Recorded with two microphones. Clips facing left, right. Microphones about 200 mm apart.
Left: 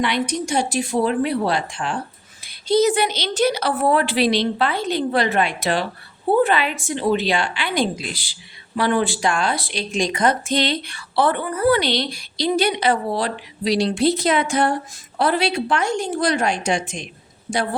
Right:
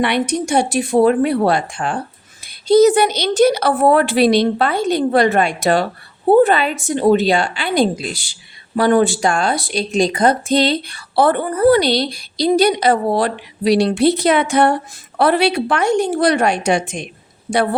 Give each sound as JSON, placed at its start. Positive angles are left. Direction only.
{"t": 0.0, "sound": "a woman's voice", "side_deg": -60}